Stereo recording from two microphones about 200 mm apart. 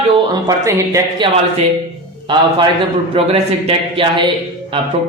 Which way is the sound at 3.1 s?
30° right (ahead or behind).